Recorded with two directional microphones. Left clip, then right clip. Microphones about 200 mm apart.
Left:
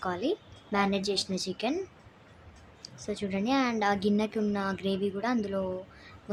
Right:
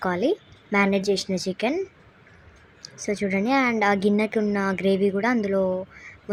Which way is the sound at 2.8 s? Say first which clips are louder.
Right 9 dB; 15° right (ahead or behind).